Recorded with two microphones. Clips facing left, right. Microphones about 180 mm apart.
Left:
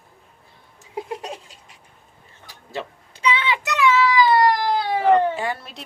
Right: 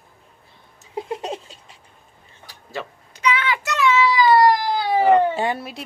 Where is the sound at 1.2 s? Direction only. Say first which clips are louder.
Right 4 dB; 25° right (ahead or behind).